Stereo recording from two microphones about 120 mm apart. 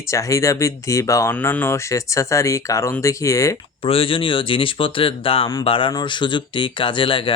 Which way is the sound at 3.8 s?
50° left (ahead or behind).